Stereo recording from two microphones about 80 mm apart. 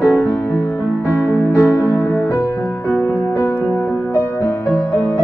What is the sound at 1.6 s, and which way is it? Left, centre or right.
Music, left.